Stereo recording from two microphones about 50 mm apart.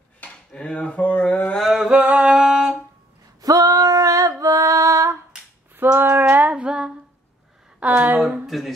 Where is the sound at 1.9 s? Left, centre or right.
Right.